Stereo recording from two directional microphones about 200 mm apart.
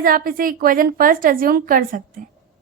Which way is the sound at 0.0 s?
45° right (ahead or behind).